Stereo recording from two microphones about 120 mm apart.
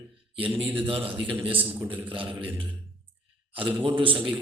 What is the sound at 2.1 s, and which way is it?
A man's voice, 45° right (ahead or behind).